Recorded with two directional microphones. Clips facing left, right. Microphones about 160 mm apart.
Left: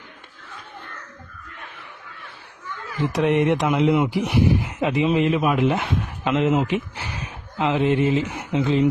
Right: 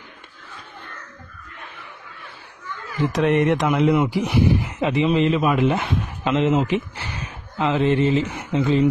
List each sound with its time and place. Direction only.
3.1 s speech: centre (ahead or behind)
3.6 s a man's voice: 15° left (ahead or behind)
4.1 s speech: centre (ahead or behind)
4.6 s speech: 10° left (ahead or behind)